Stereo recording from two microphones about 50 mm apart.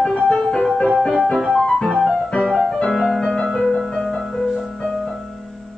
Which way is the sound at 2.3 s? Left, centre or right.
Centre.